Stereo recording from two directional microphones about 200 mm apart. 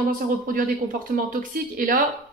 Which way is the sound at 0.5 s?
45° right (ahead or behind).